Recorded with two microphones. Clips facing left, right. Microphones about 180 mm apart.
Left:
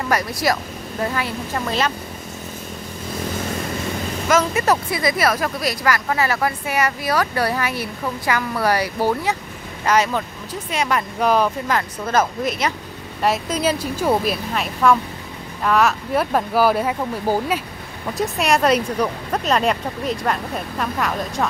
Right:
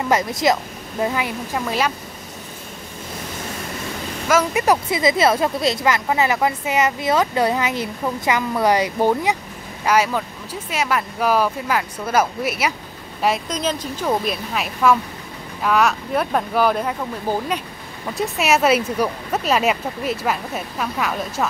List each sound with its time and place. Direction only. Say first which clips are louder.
0.1 s speech: right 3 dB; 20° right (ahead or behind)
4.3 s speech: right 1 dB; 10° right (ahead or behind)
13.2 s speech: left 1 dB; 5° left (ahead or behind)